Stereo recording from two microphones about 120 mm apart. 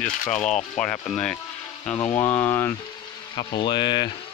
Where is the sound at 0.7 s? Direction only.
10° left (ahead or behind).